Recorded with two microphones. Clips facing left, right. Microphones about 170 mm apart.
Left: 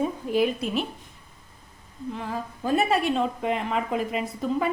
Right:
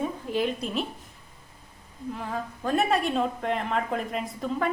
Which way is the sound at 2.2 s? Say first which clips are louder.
Left 1 dB; centre (ahead or behind).